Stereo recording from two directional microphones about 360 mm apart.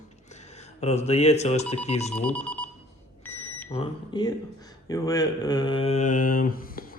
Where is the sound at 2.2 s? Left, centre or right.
Centre.